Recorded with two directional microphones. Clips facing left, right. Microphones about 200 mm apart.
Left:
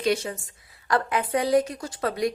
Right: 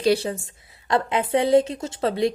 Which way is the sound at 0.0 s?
35° right (ahead or behind).